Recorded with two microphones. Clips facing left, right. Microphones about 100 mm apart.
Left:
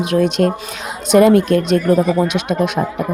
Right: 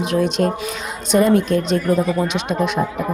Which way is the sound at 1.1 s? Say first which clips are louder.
Left 5 dB; 70° left (ahead or behind).